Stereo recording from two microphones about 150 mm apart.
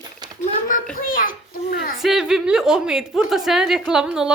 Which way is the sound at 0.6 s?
65° left (ahead or behind).